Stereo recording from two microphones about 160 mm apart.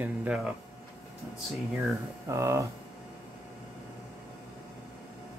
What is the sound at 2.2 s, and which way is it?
Speech, 20° right (ahead or behind).